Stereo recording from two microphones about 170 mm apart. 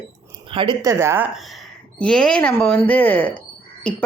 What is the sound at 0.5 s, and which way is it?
Speech, 30° right (ahead or behind).